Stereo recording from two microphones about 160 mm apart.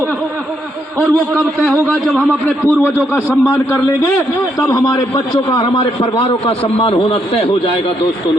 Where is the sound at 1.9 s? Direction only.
5° left (ahead or behind); by 7.7 s 35° left (ahead or behind).